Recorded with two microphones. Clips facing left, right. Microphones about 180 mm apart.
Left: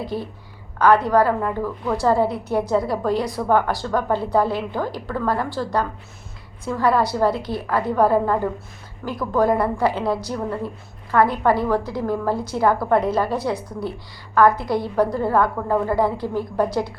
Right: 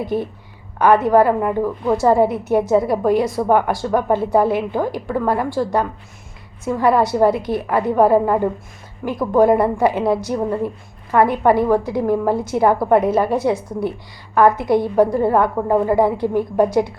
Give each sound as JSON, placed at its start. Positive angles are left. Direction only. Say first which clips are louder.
{"t": 0.1, "sound": "a woman's voice", "louder": "right 6 dB", "side_deg": -20}
{"t": 6.7, "sound": "a woman's voice", "louder": "right 4 dB", "side_deg": -20}